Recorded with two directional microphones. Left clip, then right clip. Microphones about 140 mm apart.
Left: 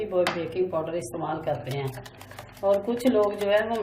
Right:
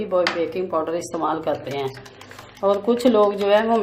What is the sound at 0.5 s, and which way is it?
A woman's voice, 55° right (ahead or behind).